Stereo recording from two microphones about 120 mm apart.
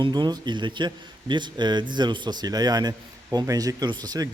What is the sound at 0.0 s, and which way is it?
A man's voice, 35° right (ahead or behind).